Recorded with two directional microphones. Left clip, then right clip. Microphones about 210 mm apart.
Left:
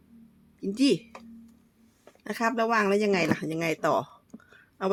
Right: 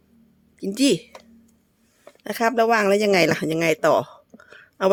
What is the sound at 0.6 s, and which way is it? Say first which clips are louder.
Speech: right 5 dB; 50° right (ahead or behind).